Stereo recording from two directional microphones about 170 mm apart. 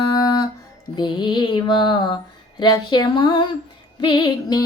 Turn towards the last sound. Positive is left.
turn(degrees=25)  # may be behind; listen again after turning